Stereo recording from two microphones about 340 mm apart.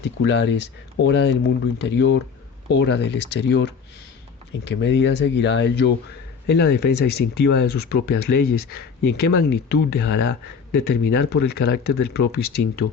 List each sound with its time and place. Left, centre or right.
0.2 s speech: left